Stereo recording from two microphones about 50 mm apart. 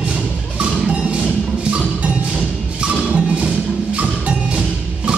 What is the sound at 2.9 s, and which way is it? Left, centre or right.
Music, right.